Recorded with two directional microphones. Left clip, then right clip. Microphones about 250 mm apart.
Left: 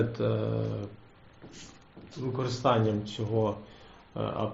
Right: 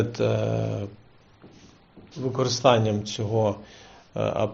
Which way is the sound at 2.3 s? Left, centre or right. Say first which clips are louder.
Right 7 dB; right.